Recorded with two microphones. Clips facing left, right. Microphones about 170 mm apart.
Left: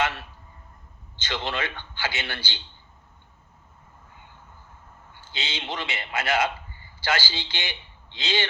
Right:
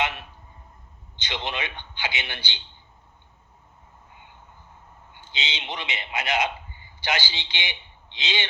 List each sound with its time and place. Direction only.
0.0 s a sound: 15° right (ahead or behind)
1.3 s speech: 15° right (ahead or behind)
5.1 s a man's voice: 20° right (ahead or behind)